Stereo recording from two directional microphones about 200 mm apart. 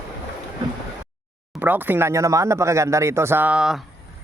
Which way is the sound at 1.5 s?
10° right (ahead or behind).